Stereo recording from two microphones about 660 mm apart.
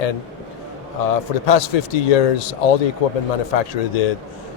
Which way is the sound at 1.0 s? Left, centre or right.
Left.